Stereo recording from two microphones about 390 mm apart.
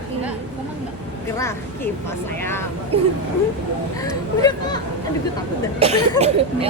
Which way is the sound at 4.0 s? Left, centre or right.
Centre.